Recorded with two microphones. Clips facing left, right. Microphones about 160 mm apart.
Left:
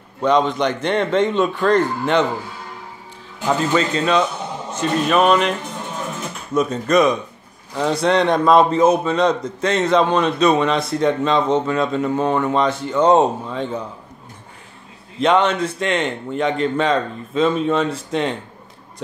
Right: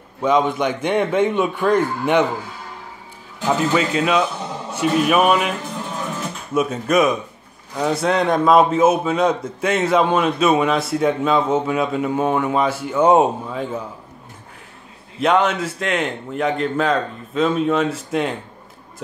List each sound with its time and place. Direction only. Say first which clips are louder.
0.2 s a man's voice: left 1 dB; 10° right (ahead or behind)
3.4 s a man's voice: even; 10° right (ahead or behind)
6.5 s a man's voice: left 1 dB; 5° right (ahead or behind)
15.1 s a man's voice: left 1 dB; centre (ahead or behind)